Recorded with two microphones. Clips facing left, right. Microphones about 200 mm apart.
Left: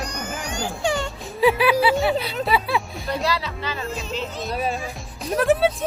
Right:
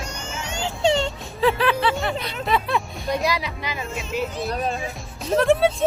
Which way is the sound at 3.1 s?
15° right (ahead or behind).